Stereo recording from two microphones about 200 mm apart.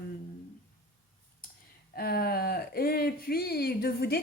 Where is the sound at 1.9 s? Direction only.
50° left (ahead or behind).